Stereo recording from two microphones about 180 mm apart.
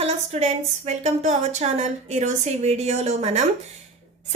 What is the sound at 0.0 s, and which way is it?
A woman's voice, 40° right (ahead or behind).